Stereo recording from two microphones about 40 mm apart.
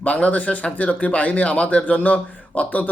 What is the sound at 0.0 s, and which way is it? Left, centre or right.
Speech, left.